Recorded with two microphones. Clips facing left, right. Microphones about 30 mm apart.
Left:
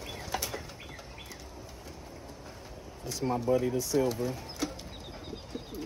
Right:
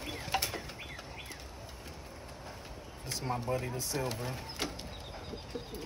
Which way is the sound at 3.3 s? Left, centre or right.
Right.